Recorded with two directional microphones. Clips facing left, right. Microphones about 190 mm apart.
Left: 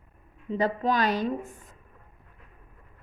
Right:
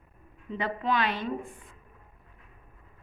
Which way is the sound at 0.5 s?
40° left (ahead or behind).